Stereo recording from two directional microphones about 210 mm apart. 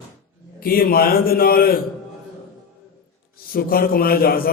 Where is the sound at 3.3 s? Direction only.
45° left (ahead or behind).